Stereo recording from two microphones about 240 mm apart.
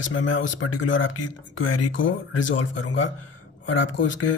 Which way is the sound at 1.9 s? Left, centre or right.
Left.